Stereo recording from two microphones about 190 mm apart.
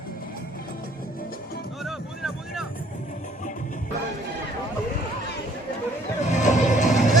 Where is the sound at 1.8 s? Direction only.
Centre (ahead or behind).